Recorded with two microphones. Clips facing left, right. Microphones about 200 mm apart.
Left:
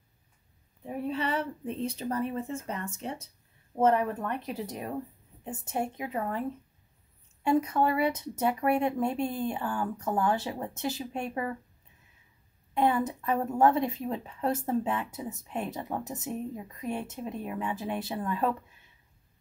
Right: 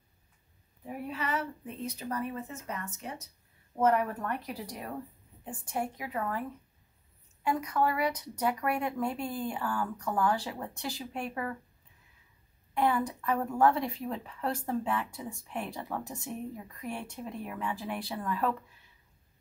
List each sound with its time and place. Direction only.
0.8 s a woman's voice: 30° left (ahead or behind)
7.4 s a woman's voice: 25° left (ahead or behind)
12.7 s a woman's voice: 25° left (ahead or behind)